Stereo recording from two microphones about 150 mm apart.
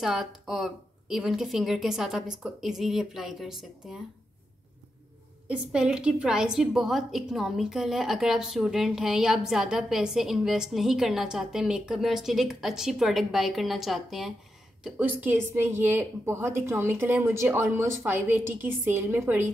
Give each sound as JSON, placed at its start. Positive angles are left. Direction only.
{"t": 0.0, "sound": "a woman's voice", "side_deg": 0}
{"t": 5.5, "sound": "a woman's voice", "side_deg": -5}